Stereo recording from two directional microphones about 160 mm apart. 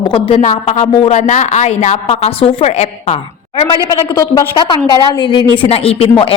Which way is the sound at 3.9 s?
20° left (ahead or behind).